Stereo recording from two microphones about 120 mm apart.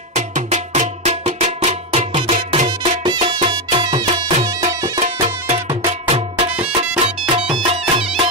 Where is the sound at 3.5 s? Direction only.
35° right (ahead or behind).